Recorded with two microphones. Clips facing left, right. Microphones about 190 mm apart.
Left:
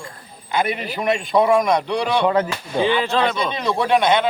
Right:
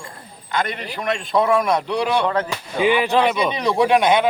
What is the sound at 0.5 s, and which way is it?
A man's voice, 10° left (ahead or behind).